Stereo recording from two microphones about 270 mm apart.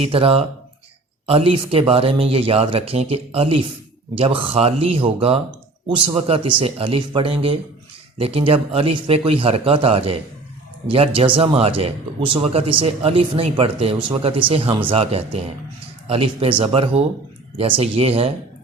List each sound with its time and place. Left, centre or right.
0.0 s speech: right